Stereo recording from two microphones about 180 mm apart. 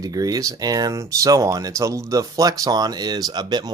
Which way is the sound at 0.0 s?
20° right (ahead or behind).